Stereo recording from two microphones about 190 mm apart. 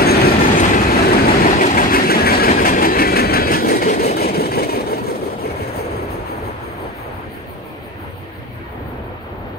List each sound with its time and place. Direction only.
0.0 s train: 55° left (ahead or behind)